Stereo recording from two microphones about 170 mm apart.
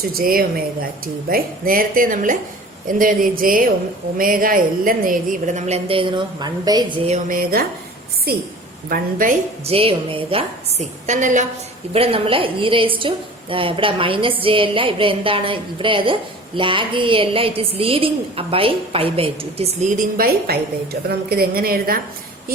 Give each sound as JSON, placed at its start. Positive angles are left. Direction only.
{"t": 0.2, "sound": "a woman's voice", "side_deg": -60}
{"t": 7.1, "sound": "speech", "side_deg": -55}
{"t": 8.3, "sound": "speech", "side_deg": -65}
{"t": 9.6, "sound": "a woman's voice", "side_deg": -35}
{"t": 11.9, "sound": "a woman's voice", "side_deg": -35}